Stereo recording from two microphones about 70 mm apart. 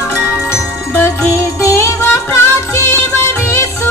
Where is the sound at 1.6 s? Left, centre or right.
Left.